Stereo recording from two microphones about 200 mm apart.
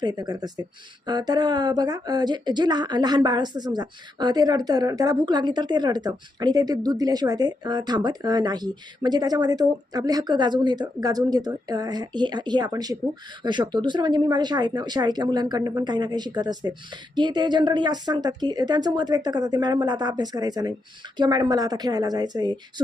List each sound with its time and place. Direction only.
0.0 s speech: 20° right (ahead or behind)